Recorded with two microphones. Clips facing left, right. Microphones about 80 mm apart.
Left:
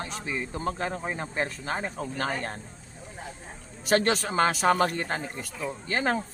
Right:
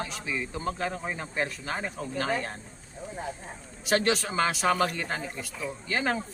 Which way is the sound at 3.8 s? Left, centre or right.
Left.